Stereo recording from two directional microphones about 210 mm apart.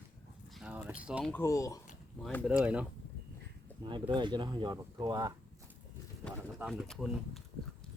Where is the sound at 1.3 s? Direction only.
15° left (ahead or behind).